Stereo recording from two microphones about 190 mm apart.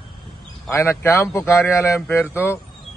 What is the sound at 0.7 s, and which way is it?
Speech, 15° left (ahead or behind).